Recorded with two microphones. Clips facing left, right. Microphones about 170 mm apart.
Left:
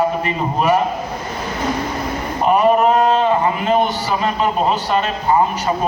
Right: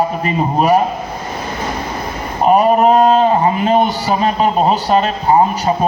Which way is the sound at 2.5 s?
40° right (ahead or behind).